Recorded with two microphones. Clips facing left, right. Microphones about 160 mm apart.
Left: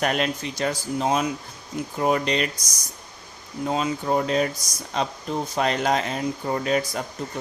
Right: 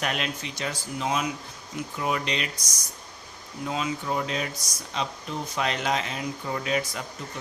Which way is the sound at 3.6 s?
40° left (ahead or behind).